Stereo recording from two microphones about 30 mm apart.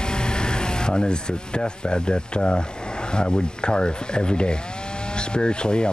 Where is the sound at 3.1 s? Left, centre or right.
Left.